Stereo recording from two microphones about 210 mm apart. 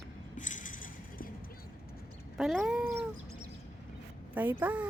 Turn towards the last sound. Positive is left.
turn(degrees=-10)  # may be behind; listen again after turning